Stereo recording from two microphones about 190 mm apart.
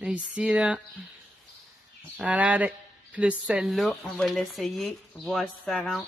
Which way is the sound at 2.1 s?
5° right (ahead or behind).